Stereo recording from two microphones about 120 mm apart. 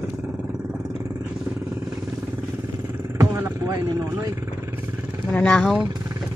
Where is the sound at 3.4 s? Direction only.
30° right (ahead or behind).